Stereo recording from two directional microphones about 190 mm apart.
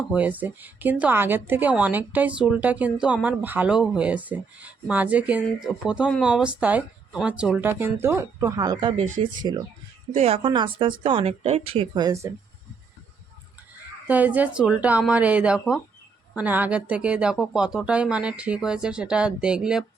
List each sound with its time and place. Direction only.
0.1 s speech: 10° right (ahead or behind)
14.1 s speech: 10° right (ahead or behind)